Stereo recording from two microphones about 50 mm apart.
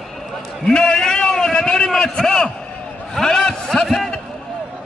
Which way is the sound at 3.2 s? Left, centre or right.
Centre.